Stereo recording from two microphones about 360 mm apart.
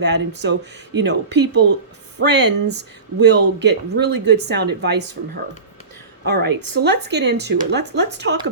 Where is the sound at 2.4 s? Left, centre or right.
Right.